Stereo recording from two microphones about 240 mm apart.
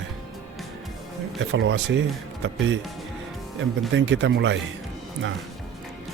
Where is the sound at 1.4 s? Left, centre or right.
Right.